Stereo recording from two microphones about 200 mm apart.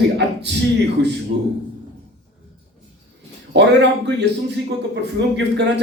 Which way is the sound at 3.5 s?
60° right (ahead or behind).